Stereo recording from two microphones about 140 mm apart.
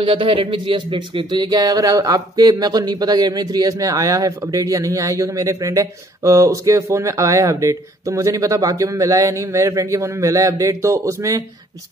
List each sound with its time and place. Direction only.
0.0 s speech: 40° right (ahead or behind); by 11.4 s 20° right (ahead or behind)